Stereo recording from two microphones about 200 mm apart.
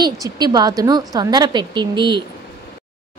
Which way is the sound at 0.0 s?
20° right (ahead or behind).